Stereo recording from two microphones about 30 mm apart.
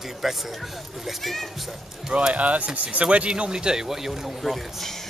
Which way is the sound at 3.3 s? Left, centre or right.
Right.